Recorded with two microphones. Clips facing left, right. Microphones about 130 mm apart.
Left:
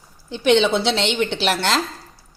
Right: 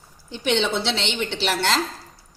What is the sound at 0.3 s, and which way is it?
Speech, 90° left.